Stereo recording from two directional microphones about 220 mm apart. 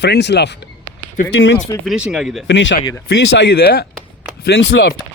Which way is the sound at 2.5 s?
55° left (ahead or behind).